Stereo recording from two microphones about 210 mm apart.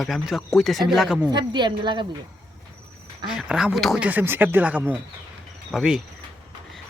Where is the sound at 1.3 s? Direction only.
20° right (ahead or behind).